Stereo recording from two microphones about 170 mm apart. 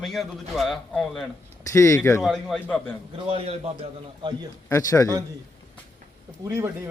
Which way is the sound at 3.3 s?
35° right (ahead or behind).